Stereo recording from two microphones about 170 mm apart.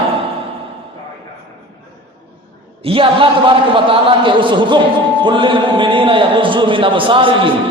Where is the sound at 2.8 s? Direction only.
30° right (ahead or behind).